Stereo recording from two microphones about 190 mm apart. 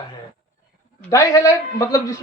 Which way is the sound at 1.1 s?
15° left (ahead or behind).